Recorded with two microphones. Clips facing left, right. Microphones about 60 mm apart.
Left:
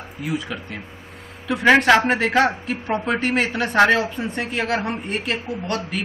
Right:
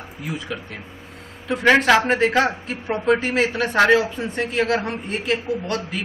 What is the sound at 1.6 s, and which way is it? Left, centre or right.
A man's voice, centre.